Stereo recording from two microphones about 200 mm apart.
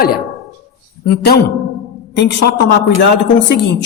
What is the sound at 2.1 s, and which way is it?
Speech, 60° left (ahead or behind).